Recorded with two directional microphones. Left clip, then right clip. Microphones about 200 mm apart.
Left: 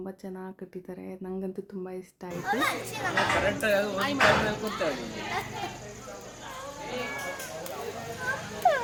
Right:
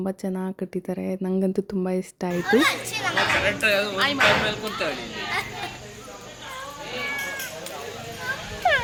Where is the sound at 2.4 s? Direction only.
40° left (ahead or behind).